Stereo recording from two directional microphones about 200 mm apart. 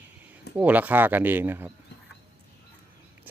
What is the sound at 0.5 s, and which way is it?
Speech, 10° right (ahead or behind).